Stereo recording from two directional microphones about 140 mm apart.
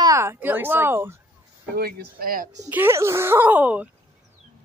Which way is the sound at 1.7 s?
90° right.